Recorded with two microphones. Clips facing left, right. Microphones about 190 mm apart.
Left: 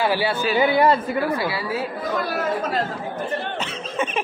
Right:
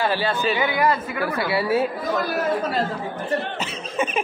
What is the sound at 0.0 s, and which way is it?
Speech, 10° left (ahead or behind).